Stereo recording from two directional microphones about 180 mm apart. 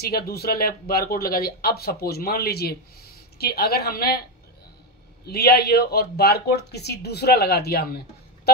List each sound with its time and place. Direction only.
0.0 s speech: 60° left (ahead or behind)
5.2 s speech: 60° left (ahead or behind)